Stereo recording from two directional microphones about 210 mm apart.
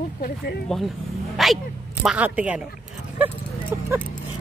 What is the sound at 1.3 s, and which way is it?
A woman's voice, centre (ahead or behind).